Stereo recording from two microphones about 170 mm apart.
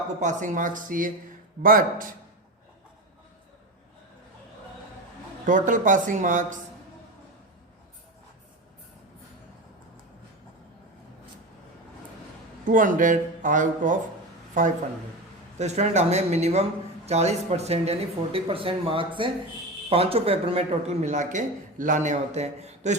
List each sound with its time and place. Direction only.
0.2 s speech: 45° right (ahead or behind)
5.5 s speech: 50° right (ahead or behind)
12.6 s speech: 50° right (ahead or behind)
15.5 s speech: 40° right (ahead or behind)